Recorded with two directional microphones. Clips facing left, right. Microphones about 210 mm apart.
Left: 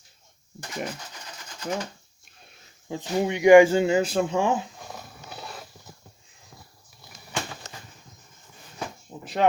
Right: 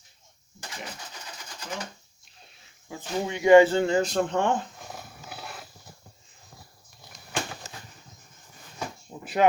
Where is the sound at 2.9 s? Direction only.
20° left (ahead or behind).